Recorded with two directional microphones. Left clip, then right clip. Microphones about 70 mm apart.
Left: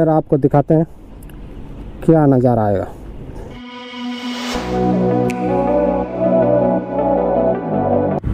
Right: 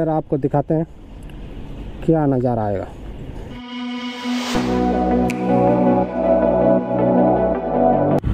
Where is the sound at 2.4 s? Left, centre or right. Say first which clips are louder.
Left 5 dB; left.